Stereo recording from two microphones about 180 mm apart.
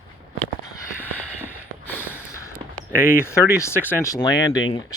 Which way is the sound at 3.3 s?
15° left (ahead or behind).